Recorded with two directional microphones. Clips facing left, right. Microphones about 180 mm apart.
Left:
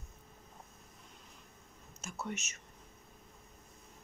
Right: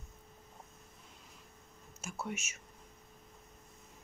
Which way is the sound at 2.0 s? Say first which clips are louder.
Even; 10° right (ahead or behind).